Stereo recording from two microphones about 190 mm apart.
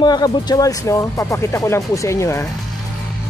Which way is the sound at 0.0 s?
20° left (ahead or behind).